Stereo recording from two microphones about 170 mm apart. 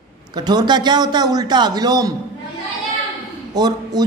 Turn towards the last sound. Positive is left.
turn(degrees=-25)  # may be behind; listen again after turning